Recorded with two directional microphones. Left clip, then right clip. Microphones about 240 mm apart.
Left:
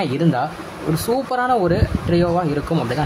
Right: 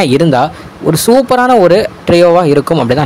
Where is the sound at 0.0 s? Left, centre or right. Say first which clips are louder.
Right 11 dB; right.